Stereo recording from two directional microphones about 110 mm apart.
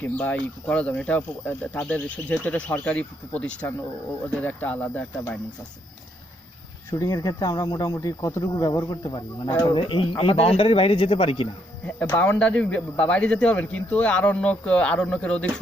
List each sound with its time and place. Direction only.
0.0 s speech: 15° left (ahead or behind)
6.9 s speech: 35° left (ahead or behind)
9.7 s speech: 50° left (ahead or behind)
11.9 s speech: 20° left (ahead or behind)